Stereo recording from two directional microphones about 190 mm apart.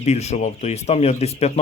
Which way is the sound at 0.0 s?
35° left (ahead or behind).